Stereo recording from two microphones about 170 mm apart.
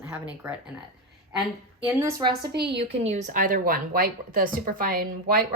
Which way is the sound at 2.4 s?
75° right (ahead or behind).